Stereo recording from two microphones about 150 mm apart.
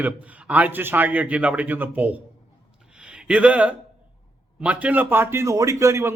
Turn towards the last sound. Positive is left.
turn(degrees=-20)  # may be behind; listen again after turning